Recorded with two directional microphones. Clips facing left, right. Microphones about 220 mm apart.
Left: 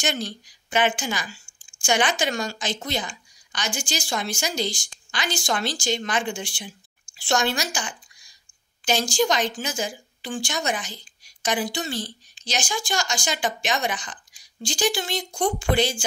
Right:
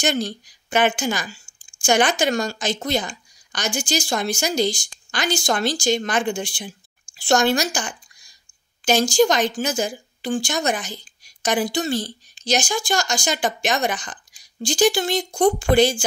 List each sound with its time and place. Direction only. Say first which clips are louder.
0.0 s a woman's voice: right 5 dB; 40° right (ahead or behind)